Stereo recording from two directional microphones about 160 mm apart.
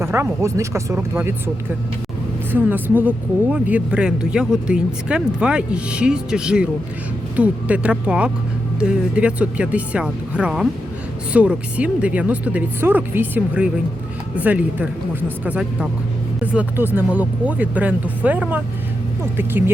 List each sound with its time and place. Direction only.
0.0 s speech: 15° right (ahead or behind)
2.5 s speech: 10° right (ahead or behind)